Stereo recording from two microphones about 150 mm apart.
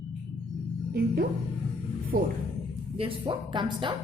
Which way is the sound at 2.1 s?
65° right (ahead or behind).